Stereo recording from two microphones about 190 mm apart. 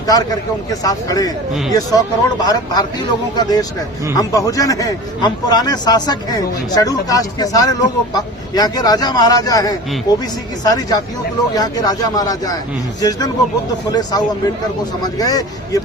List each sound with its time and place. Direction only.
0.1 s speech: 20° left (ahead or behind)